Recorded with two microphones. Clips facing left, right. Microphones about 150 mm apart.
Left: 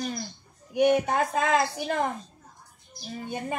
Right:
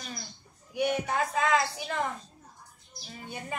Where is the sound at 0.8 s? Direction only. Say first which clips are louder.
Left 6 dB; 45° left (ahead or behind).